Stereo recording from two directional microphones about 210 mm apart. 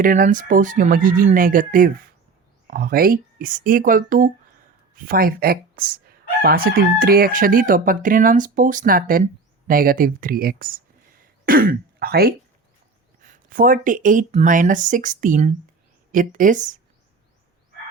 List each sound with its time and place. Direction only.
0.0 s speech: 40° right (ahead or behind)
5.0 s crowing: 45° right (ahead or behind)
11.4 s speech: 45° right (ahead or behind)